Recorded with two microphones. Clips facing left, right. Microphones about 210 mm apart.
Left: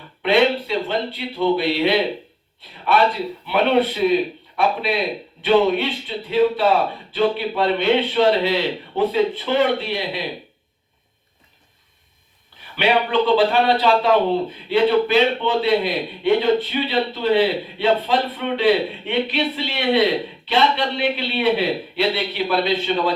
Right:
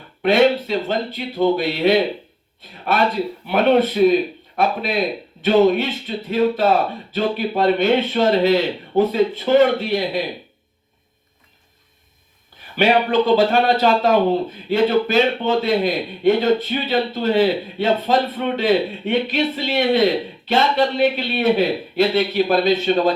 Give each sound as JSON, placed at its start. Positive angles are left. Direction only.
{"t": 0.2, "sound": "a man's voice", "side_deg": -45}
{"t": 12.7, "sound": "a man's voice", "side_deg": -45}